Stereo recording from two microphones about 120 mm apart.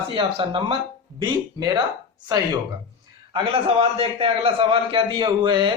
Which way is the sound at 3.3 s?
50° right (ahead or behind).